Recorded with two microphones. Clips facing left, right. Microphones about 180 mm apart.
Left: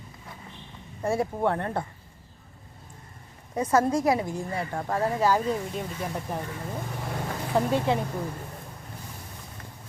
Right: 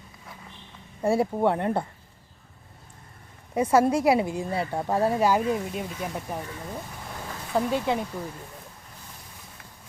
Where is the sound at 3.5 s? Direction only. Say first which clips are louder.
Right 2 dB; 10° right (ahead or behind).